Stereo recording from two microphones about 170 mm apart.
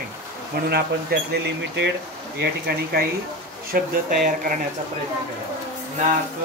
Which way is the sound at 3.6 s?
60° right (ahead or behind).